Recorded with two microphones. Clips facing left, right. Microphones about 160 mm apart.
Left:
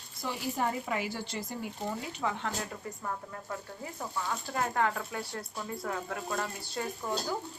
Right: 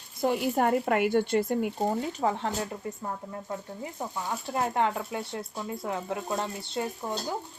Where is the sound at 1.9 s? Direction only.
35° right (ahead or behind).